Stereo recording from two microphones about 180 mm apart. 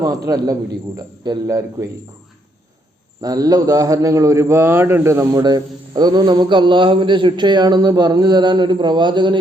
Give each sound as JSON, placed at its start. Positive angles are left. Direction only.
{"t": 0.3, "sound": "a man's voice", "side_deg": -15}
{"t": 3.2, "sound": "a man's voice", "side_deg": -20}